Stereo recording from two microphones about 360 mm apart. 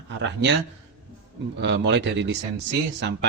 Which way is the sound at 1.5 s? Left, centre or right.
Right.